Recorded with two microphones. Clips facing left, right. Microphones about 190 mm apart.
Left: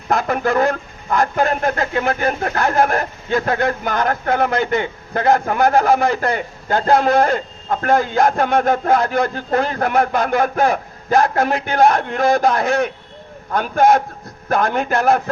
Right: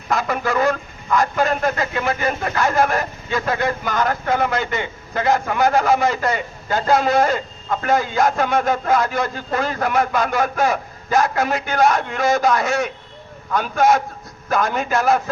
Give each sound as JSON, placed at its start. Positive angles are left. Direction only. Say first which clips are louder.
{"t": 0.1, "sound": "a man's voice", "louder": "left 3 dB", "side_deg": 55}